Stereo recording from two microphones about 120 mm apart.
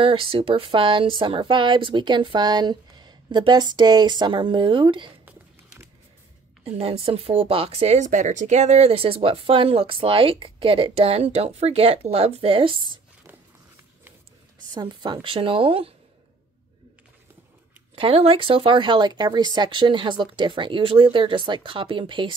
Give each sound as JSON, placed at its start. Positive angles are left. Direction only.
{"t": 0.0, "sound": "speech", "side_deg": -50}
{"t": 6.6, "sound": "speech", "side_deg": -55}
{"t": 14.7, "sound": "speech", "side_deg": -35}
{"t": 17.9, "sound": "speech", "side_deg": -50}